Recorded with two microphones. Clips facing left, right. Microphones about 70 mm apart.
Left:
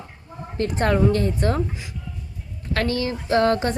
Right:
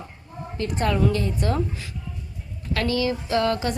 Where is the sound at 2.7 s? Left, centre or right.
Left.